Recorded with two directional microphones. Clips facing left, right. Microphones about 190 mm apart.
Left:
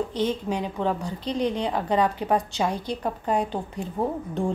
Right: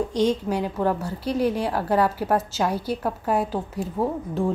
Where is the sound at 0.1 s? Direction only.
10° right (ahead or behind).